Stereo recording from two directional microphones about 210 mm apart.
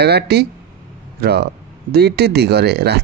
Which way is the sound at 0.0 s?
50° right (ahead or behind).